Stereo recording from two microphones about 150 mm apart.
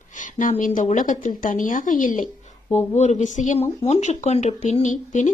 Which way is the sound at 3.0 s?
50° left (ahead or behind).